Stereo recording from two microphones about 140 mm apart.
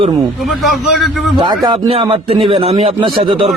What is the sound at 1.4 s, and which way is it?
A man's voice, 35° right (ahead or behind).